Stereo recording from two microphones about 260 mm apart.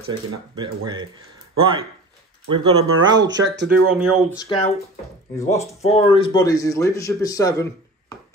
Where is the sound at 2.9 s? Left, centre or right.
Right.